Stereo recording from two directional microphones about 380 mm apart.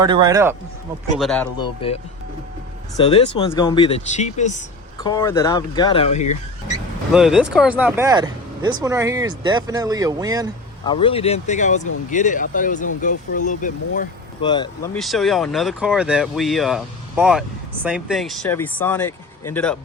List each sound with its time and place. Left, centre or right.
0.0 s speech: centre
1.2 s speech: centre
1.8 s speech: centre
3.0 s speech: centre
7.1 s speech: centre
10.8 s speech: centre
14.9 s speech: centre